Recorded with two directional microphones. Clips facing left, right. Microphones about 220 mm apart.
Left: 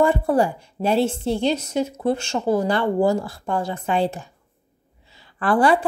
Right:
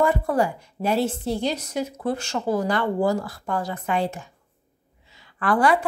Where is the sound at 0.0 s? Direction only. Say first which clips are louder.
Left 3 dB; 30° left (ahead or behind).